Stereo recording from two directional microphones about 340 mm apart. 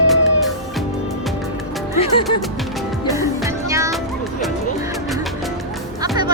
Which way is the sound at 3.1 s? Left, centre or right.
Centre.